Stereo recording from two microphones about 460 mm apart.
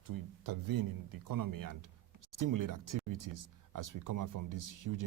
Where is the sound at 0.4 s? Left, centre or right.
Right.